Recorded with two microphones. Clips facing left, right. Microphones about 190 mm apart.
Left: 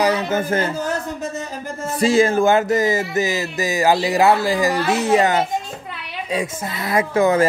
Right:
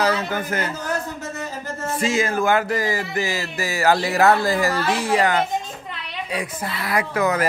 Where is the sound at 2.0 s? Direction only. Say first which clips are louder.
Left 7 dB; 30° left (ahead or behind).